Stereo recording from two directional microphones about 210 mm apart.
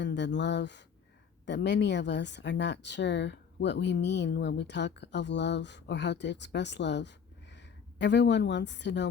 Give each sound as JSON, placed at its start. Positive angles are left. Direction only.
{"t": 0.0, "sound": "speech", "side_deg": 55}